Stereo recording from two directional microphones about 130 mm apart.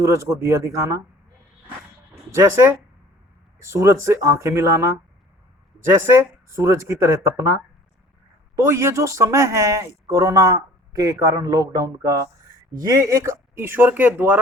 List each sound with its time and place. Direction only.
0.0 s speech: 20° right (ahead or behind)
2.3 s speech: 20° right (ahead or behind)